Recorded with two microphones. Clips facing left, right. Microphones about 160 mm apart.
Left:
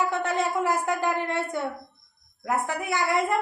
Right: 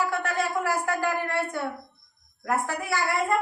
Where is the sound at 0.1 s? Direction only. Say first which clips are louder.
Left 1 dB; 20° left (ahead or behind).